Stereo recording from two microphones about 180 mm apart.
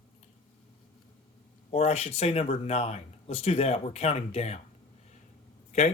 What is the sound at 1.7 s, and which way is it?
Speech, 35° left (ahead or behind).